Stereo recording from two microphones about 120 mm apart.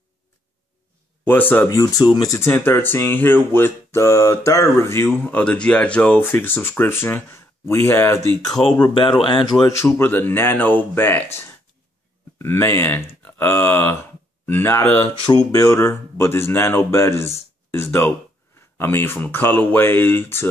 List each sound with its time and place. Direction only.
1.2 s speech: 15° left (ahead or behind)
1.7 s speech: 30° left (ahead or behind)
8.6 s speech: 5° left (ahead or behind)
9.1 s speech: 40° left (ahead or behind)
9.7 s speech: 25° left (ahead or behind)
12.4 s speech: 20° left (ahead or behind)